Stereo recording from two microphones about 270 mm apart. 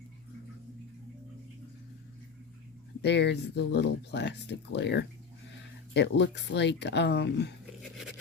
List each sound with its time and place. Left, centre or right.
3.0 s speech: left